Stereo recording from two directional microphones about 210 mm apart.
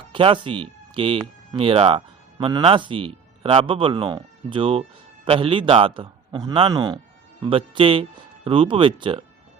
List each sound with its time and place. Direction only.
0.1 s speech: 25° right (ahead or behind)